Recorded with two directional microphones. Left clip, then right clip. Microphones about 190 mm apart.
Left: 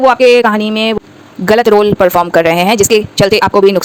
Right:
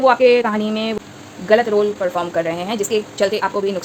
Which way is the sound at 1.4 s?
50° left (ahead or behind).